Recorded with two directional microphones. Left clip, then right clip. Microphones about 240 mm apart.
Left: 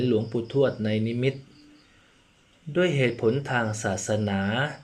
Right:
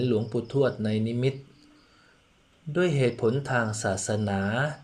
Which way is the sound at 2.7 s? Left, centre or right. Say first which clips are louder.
Left 1 dB; right.